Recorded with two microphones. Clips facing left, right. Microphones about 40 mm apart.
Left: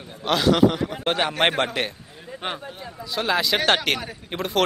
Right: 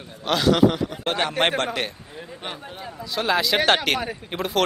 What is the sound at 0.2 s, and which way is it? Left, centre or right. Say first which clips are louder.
Speech: even; centre.